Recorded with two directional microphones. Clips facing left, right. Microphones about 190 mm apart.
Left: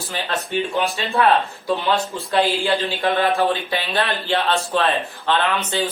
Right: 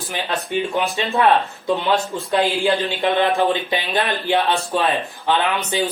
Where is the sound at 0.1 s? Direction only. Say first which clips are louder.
Right 1 dB; 15° right (ahead or behind).